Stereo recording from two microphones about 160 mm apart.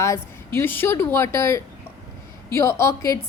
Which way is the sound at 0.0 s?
15° left (ahead or behind).